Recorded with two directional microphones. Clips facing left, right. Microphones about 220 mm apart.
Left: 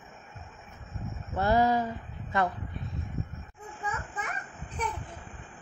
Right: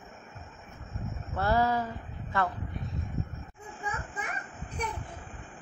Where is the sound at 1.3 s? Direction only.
15° left (ahead or behind).